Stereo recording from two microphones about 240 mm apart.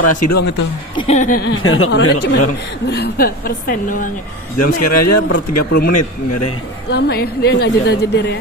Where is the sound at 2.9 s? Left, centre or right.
Left.